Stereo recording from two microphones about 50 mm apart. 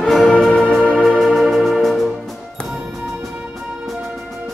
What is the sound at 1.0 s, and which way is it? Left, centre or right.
Music, centre.